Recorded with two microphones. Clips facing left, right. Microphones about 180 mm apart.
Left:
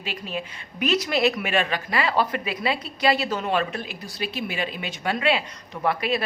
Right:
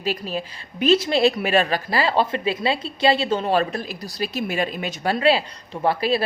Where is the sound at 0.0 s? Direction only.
35° right (ahead or behind).